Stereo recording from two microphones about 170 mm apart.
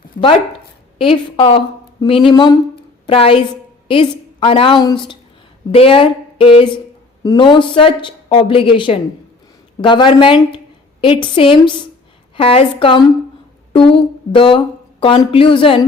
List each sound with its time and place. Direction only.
1.0 s a woman's voice: 30° left (ahead or behind)
3.1 s a woman's voice: 35° left (ahead or behind)